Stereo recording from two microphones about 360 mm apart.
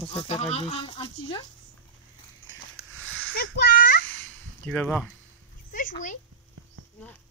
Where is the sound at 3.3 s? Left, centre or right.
Left.